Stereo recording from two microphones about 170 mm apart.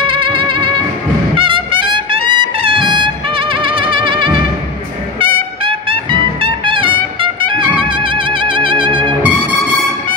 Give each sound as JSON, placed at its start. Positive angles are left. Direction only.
{"t": 0.0, "sound": "music", "side_deg": -30}
{"t": 1.3, "sound": "trumpet", "side_deg": -30}